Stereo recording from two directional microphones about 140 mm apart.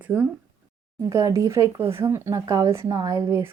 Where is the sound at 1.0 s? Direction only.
25° right (ahead or behind).